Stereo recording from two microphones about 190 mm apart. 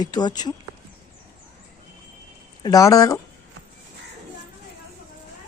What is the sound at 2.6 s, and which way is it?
Speech, 20° left (ahead or behind).